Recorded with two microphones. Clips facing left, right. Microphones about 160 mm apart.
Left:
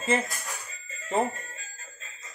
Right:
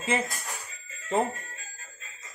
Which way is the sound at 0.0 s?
Centre (ahead or behind).